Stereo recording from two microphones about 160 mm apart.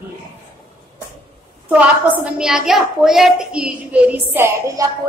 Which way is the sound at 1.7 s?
10° right (ahead or behind).